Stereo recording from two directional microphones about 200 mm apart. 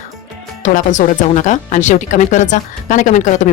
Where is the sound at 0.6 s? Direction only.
40° left (ahead or behind).